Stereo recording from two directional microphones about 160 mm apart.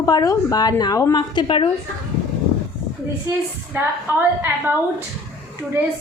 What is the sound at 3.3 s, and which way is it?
A woman's voice, 20° right (ahead or behind).